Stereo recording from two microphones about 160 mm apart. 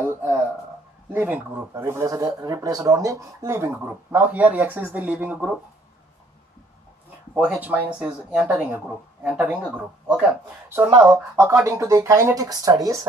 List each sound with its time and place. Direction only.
0.0 s speech: 15° right (ahead or behind)
7.3 s speech: 5° right (ahead or behind)
10.9 s speech: 25° right (ahead or behind)